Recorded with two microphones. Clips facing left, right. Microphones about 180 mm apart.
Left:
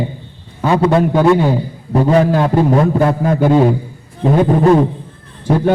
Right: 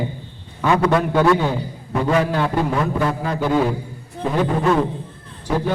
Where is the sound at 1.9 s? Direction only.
35° left (ahead or behind); by 3.6 s 50° left (ahead or behind).